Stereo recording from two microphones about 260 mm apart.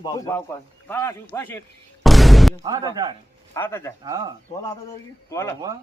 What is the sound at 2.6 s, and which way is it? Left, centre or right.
Speech, centre.